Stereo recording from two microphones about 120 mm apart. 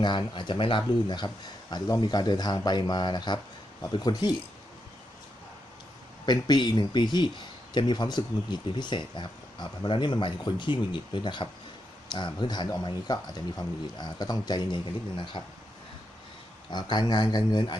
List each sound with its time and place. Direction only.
0.0 s speech: 40° left (ahead or behind)
6.2 s speech: 35° left (ahead or behind)
16.7 s speech: 40° left (ahead or behind)